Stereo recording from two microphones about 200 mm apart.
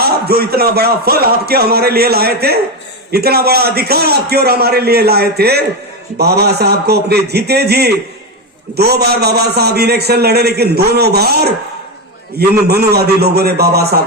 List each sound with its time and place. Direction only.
0.0 s a man's voice: 50° right (ahead or behind)